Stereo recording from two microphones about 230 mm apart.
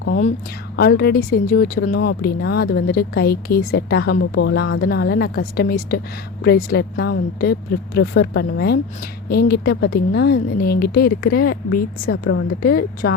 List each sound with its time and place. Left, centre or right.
0.8 s speech: left
1.9 s speech: left
2.2 s speech: left
12.3 s speech: left
12.6 s speech: left